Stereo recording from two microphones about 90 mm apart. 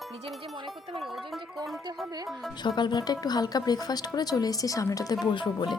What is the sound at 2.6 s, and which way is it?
Speech, 55° left (ahead or behind).